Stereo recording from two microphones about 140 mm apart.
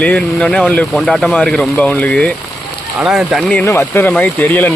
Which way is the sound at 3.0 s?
5° right (ahead or behind).